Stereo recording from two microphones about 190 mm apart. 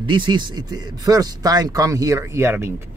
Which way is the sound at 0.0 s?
25° right (ahead or behind).